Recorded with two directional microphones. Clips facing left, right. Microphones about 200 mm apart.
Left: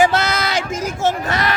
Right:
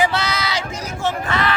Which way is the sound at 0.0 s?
45° left (ahead or behind).